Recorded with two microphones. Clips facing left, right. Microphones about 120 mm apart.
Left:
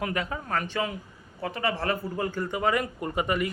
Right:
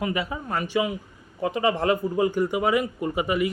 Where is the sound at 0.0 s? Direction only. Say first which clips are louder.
Right 3 dB; 5° right (ahead or behind).